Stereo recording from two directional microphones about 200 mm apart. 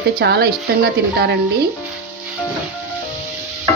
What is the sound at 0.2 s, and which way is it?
Speech, 55° right (ahead or behind).